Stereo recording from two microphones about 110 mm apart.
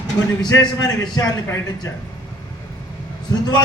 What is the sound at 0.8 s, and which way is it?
Speech, 35° left (ahead or behind).